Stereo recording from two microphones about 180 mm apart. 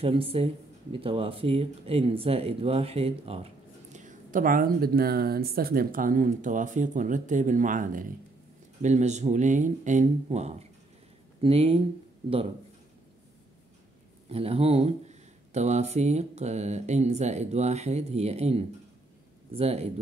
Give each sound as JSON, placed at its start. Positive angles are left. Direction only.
{"t": 0.0, "sound": "speech", "side_deg": -30}
{"t": 14.3, "sound": "speech", "side_deg": -35}